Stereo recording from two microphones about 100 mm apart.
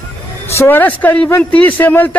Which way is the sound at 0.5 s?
25° left (ahead or behind).